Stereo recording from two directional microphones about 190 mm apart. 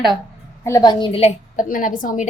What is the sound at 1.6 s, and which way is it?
Speech, 45° left (ahead or behind).